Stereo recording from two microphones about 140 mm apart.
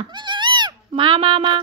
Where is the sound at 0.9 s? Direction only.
40° right (ahead or behind).